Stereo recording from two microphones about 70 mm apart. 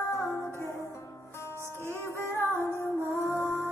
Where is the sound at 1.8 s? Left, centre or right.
Left.